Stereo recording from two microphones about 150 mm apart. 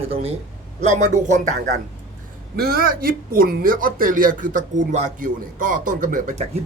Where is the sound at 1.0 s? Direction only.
55° right (ahead or behind).